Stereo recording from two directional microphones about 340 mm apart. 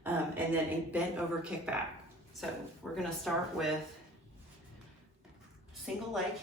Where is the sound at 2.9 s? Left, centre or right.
Centre.